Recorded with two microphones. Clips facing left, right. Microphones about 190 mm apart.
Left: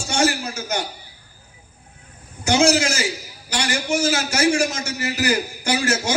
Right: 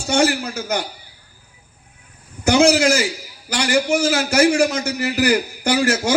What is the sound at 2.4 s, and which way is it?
A man's voice, 60° right (ahead or behind).